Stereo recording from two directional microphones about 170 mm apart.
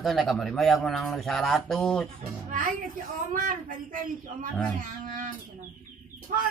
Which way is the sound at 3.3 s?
50° right (ahead or behind).